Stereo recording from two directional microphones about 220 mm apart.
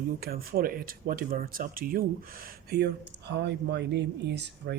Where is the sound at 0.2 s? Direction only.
40° right (ahead or behind).